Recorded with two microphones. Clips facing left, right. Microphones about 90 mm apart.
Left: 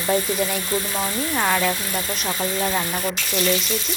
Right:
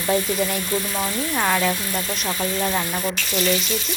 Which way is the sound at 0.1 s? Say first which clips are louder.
Even; centre (ahead or behind).